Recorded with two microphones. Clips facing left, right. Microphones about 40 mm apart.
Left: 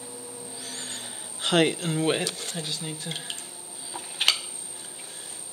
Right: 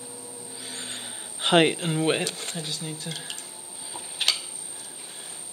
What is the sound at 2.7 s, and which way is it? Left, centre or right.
Speech, centre.